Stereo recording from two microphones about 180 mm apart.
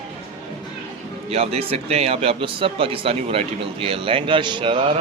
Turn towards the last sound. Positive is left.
turn(degrees=-25)  # may be behind; listen again after turning